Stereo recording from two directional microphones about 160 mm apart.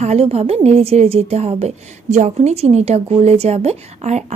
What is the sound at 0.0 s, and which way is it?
A woman's voice, 40° right (ahead or behind).